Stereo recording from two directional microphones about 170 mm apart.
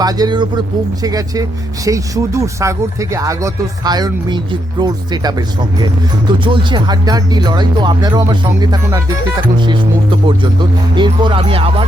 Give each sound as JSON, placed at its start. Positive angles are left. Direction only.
{"t": 0.0, "sound": "speech", "side_deg": -25}
{"t": 6.4, "sound": "speech", "side_deg": -30}